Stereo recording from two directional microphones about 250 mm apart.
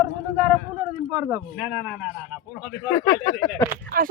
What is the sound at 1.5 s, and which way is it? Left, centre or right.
Speech, centre.